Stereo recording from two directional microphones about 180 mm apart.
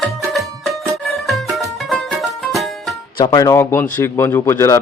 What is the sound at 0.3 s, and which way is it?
Music, centre (ahead or behind).